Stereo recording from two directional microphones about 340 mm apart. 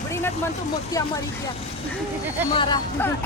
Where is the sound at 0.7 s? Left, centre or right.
Centre.